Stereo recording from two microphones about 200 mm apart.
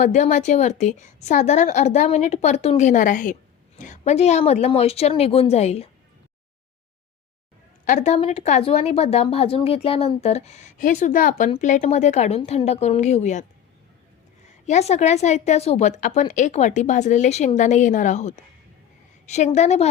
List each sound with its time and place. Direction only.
0.0 s a woman's voice: 35° left (ahead or behind)
7.9 s a woman's voice: 35° left (ahead or behind)
14.4 s a woman's voice: 35° left (ahead or behind)